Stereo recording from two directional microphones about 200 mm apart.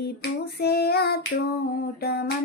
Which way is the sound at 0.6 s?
55° left (ahead or behind).